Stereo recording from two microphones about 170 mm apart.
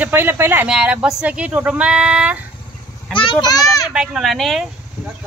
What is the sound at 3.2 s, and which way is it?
Speech, 25° left (ahead or behind).